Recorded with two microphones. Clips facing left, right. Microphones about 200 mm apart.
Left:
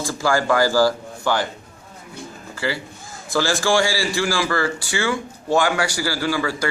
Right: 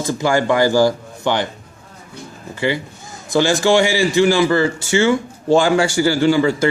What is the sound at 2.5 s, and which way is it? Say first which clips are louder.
A man's voice: right 6 dB; 20° right (ahead or behind).